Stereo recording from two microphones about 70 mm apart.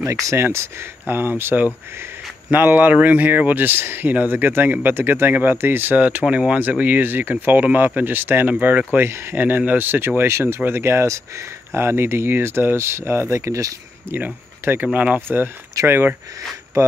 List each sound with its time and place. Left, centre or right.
0.0 s speech: right
9.4 s speech: right
14.0 s speech: right
15.9 s speech: right
16.8 s speech: right